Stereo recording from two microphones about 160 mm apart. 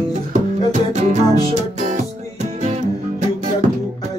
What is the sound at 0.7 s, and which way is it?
Music, 45° right (ahead or behind).